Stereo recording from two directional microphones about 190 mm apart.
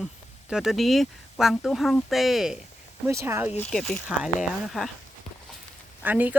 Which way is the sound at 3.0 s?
15° right (ahead or behind).